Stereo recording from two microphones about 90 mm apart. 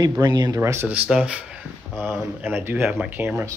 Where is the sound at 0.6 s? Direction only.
30° right (ahead or behind).